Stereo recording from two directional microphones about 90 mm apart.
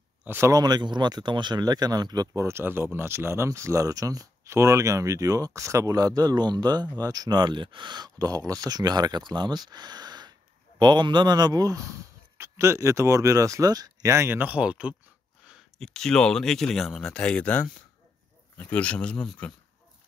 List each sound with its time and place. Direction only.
0.2 s a sound: 20° right (ahead or behind)
0.5 s speech: 50° right (ahead or behind)
2.4 s speech: 25° right (ahead or behind); by 7.2 s 45° right (ahead or behind)
7.2 s a man's voice: 60° right (ahead or behind); by 14.4 s 30° right (ahead or behind)
14.4 s speech: 15° right (ahead or behind)
15.8 s speech: 5° left (ahead or behind)